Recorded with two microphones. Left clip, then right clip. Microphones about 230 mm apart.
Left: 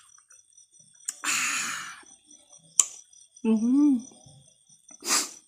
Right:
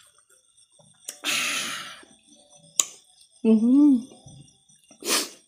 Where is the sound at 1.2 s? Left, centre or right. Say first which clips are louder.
Right 2 dB; centre.